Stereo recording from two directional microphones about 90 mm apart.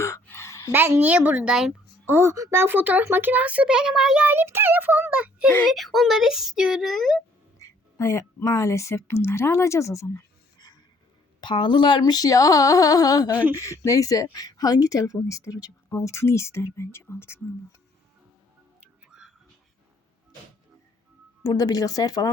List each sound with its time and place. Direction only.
0.0 s a sound: 30° left (ahead or behind)
0.7 s a child's voice: 25° right (ahead or behind); by 4.3 s 5° right (ahead or behind)
4.3 s a child's voice: 25° right (ahead or behind)
5.6 s speech: centre (ahead or behind)
6.9 s speech: 5° left (ahead or behind)
7.9 s speech: 40° left (ahead or behind)
11.4 s speech: 60° left (ahead or behind); by 17.7 s 30° left (ahead or behind)
18.8 s music: 10° right (ahead or behind)
21.4 s speech: 45° left (ahead or behind)